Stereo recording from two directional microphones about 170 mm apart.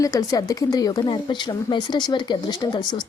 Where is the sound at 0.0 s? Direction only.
20° left (ahead or behind).